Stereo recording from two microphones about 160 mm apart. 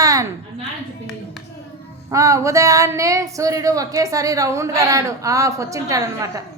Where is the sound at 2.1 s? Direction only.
20° right (ahead or behind).